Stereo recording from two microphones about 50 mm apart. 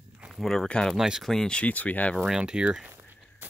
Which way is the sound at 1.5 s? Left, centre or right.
Left.